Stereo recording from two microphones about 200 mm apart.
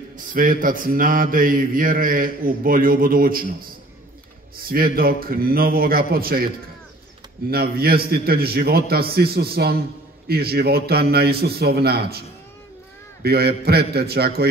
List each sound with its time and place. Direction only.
0.3 s a man's voice: 45° right (ahead or behind)
4.6 s a man's voice: 45° right (ahead or behind)
7.5 s a man's voice: 50° right (ahead or behind)